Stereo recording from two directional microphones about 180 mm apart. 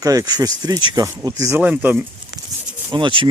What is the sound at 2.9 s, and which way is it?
Speech, 25° right (ahead or behind).